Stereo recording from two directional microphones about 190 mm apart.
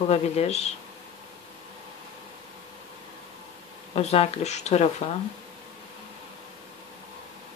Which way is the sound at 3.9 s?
30° left (ahead or behind).